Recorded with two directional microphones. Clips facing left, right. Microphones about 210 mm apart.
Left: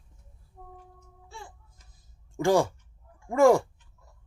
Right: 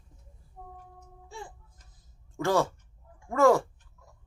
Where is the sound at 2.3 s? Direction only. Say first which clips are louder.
Left 3 dB; 15° left (ahead or behind).